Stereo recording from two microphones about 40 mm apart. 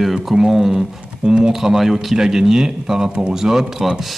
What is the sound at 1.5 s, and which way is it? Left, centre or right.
Speech, centre.